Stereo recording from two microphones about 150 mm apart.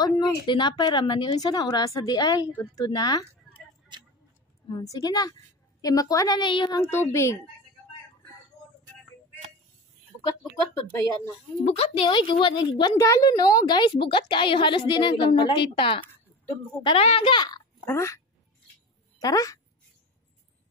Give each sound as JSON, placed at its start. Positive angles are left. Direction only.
{"t": 0.0, "sound": "speech", "side_deg": 30}
{"t": 4.6, "sound": "speech", "side_deg": 30}
{"t": 6.8, "sound": "speech", "side_deg": 15}
{"t": 11.6, "sound": "a woman's voice", "side_deg": 45}